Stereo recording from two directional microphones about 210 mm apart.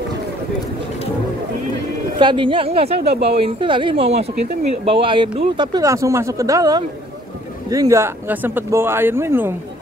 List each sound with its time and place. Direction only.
2.1 s a woman's voice: 25° right (ahead or behind)